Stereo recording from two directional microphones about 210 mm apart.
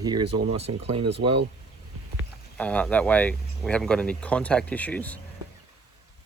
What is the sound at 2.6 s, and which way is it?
Speech, 5° left (ahead or behind).